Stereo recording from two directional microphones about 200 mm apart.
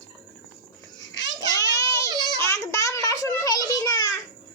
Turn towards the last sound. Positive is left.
turn(degrees=20)  # may be behind; listen again after turning